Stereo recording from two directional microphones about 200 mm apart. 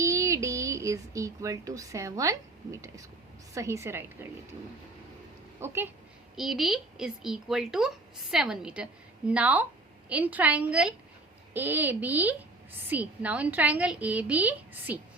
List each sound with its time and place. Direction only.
0.0 s a woman's voice: 15° right (ahead or behind)
5.5 s a woman's voice: 10° right (ahead or behind)
6.3 s a woman's voice: centre (ahead or behind)